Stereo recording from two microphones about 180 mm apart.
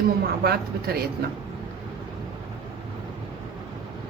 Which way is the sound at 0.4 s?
60° right (ahead or behind).